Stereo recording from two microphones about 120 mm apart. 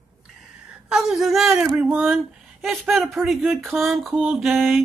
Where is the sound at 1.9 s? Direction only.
15° right (ahead or behind).